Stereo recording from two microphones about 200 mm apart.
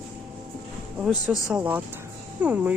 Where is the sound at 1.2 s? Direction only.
5° right (ahead or behind).